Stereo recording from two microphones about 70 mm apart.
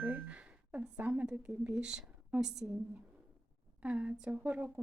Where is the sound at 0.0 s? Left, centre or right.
Right.